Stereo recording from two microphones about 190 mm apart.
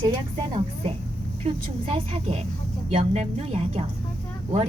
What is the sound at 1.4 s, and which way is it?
A woman's voice, 30° right (ahead or behind).